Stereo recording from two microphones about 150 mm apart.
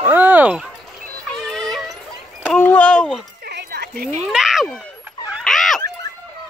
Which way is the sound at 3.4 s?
90° right.